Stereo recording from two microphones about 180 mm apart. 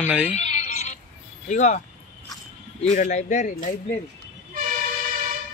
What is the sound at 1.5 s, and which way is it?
Speech, 40° left (ahead or behind).